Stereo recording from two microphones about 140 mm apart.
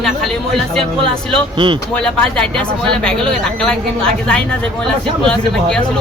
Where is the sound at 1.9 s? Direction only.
5° left (ahead or behind).